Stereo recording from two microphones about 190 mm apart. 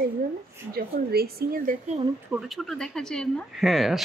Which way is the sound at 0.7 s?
55° right (ahead or behind).